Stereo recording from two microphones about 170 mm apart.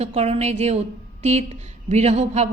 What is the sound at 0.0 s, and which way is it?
A woman's voice, 40° right (ahead or behind).